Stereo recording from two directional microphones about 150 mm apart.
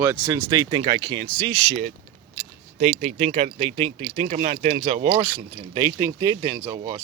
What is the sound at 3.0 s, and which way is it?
Speech, 45° right (ahead or behind).